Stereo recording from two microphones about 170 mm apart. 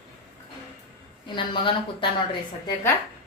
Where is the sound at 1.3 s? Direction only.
30° left (ahead or behind).